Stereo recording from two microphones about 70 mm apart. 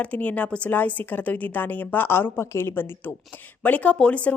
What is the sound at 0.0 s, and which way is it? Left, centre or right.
Speech, left.